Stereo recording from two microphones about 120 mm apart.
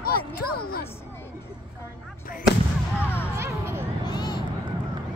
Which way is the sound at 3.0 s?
20° left (ahead or behind).